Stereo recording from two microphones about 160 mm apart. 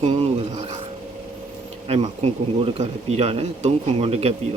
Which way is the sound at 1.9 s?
40° right (ahead or behind).